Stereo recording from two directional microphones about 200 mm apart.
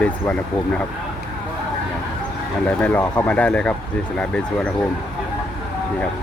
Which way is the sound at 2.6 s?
5° left (ahead or behind).